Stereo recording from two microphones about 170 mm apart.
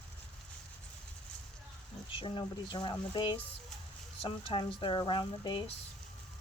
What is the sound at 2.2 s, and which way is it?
Speech, 30° left (ahead or behind).